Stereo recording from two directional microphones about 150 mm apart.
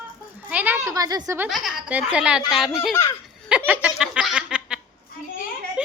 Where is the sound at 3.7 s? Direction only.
5° right (ahead or behind).